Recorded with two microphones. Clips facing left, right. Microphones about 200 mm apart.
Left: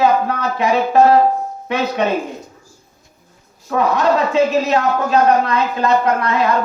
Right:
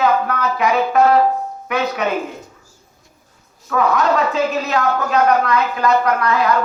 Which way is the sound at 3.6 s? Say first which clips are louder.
Left 1 dB; 30° left (ahead or behind).